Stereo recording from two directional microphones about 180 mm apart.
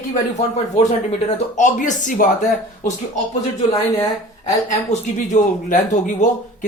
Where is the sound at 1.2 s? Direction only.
40° left (ahead or behind).